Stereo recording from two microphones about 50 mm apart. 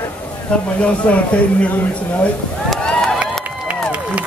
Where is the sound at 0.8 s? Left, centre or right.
Left.